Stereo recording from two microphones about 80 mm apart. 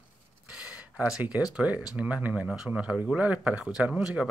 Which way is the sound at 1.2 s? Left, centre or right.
Centre.